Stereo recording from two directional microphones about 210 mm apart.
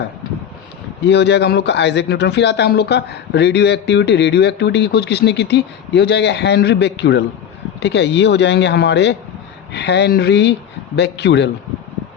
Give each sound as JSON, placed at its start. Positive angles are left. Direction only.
{"t": 1.0, "sound": "a man's voice", "side_deg": 55}